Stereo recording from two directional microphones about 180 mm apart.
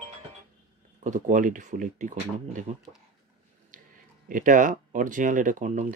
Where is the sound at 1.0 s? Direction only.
45° right (ahead or behind).